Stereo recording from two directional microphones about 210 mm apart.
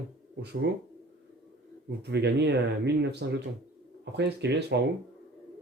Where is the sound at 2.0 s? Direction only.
55° right (ahead or behind).